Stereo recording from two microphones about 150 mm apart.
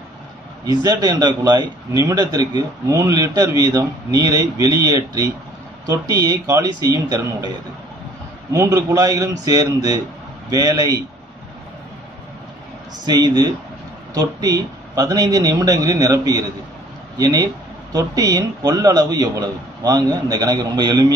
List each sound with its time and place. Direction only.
0.7 s a man's voice: 25° right (ahead or behind)
8.5 s a man's voice: 20° right (ahead or behind)
13.0 s a man's voice: 25° right (ahead or behind)